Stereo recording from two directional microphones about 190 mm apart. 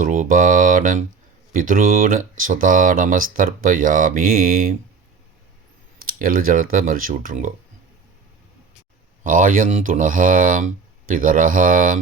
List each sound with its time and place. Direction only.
0.0 s speech: 45° right (ahead or behind)
6.1 s speech: 50° right (ahead or behind)
9.2 s speech: 45° right (ahead or behind)